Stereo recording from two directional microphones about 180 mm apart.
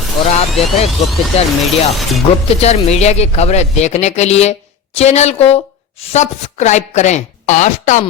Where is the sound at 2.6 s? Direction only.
35° left (ahead or behind).